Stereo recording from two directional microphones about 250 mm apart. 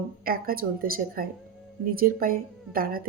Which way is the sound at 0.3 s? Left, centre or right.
Right.